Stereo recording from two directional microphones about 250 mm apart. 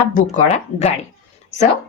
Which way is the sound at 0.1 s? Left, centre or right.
Left.